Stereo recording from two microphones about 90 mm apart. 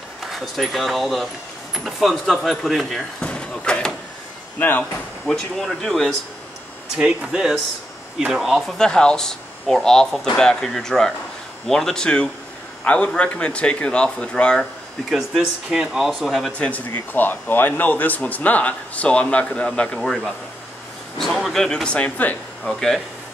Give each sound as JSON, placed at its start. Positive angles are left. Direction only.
{"t": 0.2, "sound": "speech", "side_deg": 0}
{"t": 3.2, "sound": "a sound", "side_deg": 10}
{"t": 4.6, "sound": "speech", "side_deg": 20}
{"t": 5.2, "sound": "speech", "side_deg": 5}
{"t": 7.0, "sound": "speech", "side_deg": -5}
{"t": 15.0, "sound": "speech", "side_deg": -5}
{"t": 16.5, "sound": "speech", "side_deg": 15}
{"t": 21.2, "sound": "speech", "side_deg": 0}
{"t": 22.8, "sound": "speech", "side_deg": 5}